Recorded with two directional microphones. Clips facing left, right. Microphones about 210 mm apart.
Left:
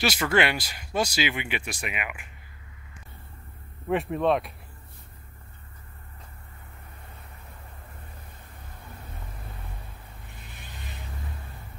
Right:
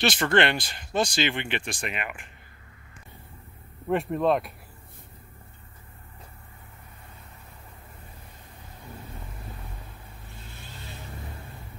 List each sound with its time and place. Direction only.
0.0 s speech: 10° left (ahead or behind)
3.8 s speech: centre (ahead or behind)
10.3 s vehicle: 15° left (ahead or behind)